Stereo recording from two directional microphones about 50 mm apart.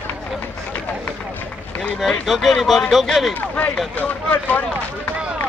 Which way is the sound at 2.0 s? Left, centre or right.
Centre.